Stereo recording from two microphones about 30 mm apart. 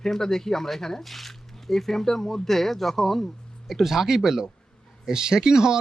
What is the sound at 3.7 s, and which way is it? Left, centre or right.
Speech, centre.